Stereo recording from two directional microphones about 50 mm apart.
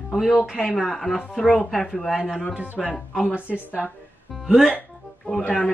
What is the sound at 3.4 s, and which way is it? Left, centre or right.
Speech, left.